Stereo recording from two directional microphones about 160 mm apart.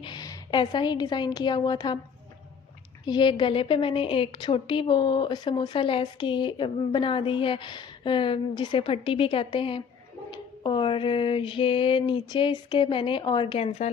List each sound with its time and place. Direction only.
0.0 s a woman's voice: 25° left (ahead or behind)
3.1 s a woman's voice: 30° left (ahead or behind)